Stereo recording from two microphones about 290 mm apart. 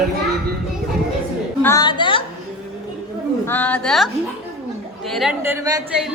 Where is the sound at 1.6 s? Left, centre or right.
Centre.